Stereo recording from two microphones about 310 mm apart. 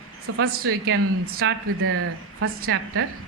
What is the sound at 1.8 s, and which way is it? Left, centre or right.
A woman's voice, right.